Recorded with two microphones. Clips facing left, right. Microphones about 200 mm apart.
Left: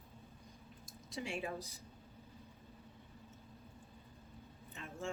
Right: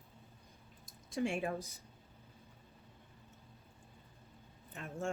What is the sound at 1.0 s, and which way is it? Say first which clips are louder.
Speech: right 6 dB; 50° right (ahead or behind).